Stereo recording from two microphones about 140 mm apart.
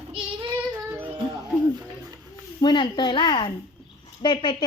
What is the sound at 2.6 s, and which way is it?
A woman's voice, 35° left (ahead or behind).